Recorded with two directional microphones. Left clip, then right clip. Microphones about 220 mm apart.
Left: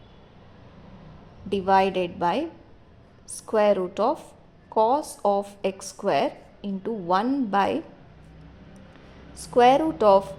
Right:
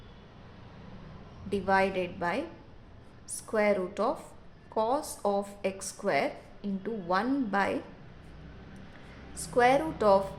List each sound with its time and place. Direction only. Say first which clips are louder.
1.5 s a woman's voice: left 6 dB; 30° left (ahead or behind)
9.3 s a woman's voice: left 7 dB; 25° left (ahead or behind)